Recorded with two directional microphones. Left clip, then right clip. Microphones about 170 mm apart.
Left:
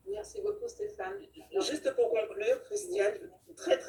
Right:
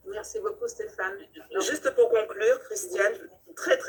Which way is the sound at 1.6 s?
50° right (ahead or behind).